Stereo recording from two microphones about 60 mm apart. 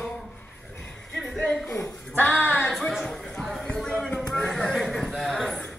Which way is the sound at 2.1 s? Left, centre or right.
Left.